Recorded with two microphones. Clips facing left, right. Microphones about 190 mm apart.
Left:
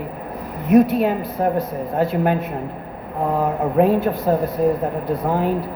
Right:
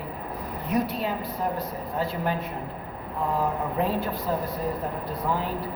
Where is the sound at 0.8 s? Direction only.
50° left (ahead or behind).